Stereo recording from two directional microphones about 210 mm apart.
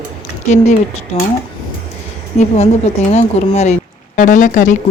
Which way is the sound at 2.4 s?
30° left (ahead or behind).